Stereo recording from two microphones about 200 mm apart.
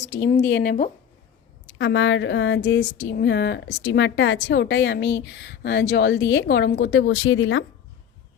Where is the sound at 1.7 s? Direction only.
70° left (ahead or behind).